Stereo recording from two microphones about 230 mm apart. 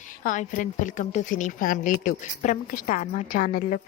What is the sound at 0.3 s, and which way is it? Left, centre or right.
A woman's voice, left.